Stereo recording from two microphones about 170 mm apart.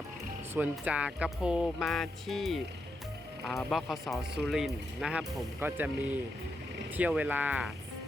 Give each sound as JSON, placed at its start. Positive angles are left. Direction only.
{"t": 0.5, "sound": "speech", "side_deg": -10}